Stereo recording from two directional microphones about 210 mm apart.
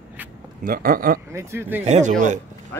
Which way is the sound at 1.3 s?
15° right (ahead or behind).